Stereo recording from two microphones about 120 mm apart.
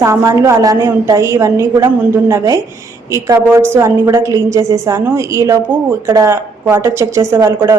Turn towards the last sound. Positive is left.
turn(degrees=-20)  # may be behind; listen again after turning